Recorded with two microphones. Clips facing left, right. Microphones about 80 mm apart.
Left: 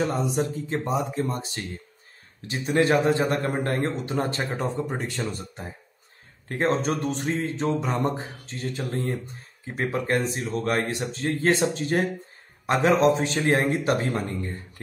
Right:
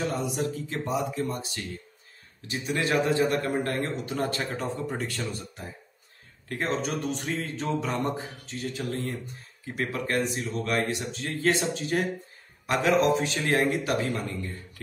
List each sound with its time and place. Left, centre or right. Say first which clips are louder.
0.4 s a man's voice: left 4 dB; left
4.4 s speech: left 3 dB; centre
6.5 s a man's voice: left 5 dB; left
7.3 s speech: left 4 dB; left
8.5 s a man's voice: left 1 dB; left